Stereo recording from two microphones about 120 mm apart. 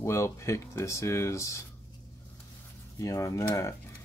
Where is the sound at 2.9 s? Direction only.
25° left (ahead or behind).